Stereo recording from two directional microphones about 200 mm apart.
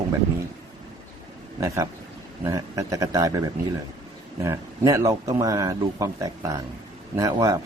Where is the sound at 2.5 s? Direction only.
15° right (ahead or behind).